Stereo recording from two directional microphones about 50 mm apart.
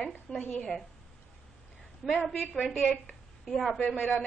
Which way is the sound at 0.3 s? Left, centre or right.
Centre.